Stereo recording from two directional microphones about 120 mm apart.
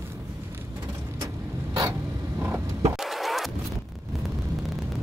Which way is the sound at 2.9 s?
Centre (ahead or behind).